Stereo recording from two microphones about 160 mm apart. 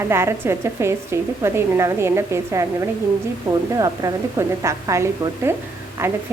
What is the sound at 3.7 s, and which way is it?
A woman's voice, 20° right (ahead or behind).